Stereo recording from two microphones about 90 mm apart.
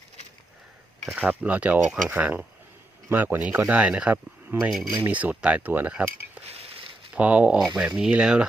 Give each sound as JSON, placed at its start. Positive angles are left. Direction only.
{"t": 1.2, "sound": "speech", "side_deg": -15}
{"t": 4.7, "sound": "speech", "side_deg": 0}
{"t": 5.0, "sound": "speech", "side_deg": -15}